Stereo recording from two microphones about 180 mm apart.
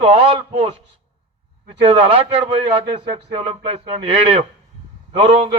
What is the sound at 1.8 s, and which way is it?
A man's voice, 30° right (ahead or behind).